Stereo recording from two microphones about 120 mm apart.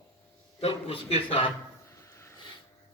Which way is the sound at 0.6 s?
55° left (ahead or behind).